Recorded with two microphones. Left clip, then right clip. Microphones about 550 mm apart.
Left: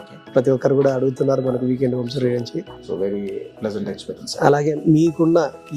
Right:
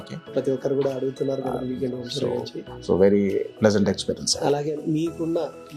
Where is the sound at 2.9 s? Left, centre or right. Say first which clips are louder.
Right 5 dB; right.